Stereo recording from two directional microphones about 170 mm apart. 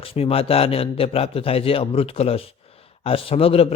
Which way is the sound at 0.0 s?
35° left (ahead or behind).